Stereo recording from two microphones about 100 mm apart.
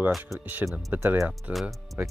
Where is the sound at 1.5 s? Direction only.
Centre (ahead or behind).